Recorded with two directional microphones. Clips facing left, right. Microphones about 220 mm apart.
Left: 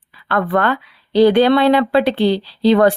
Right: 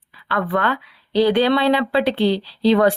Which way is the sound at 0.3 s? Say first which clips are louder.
Left 4 dB; 50° left (ahead or behind).